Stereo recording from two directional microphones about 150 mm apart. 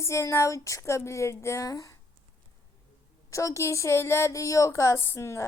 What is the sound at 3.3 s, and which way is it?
Speech, 20° left (ahead or behind).